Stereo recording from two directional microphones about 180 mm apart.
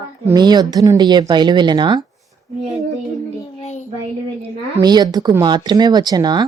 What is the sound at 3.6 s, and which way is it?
Child singing, 40° left (ahead or behind).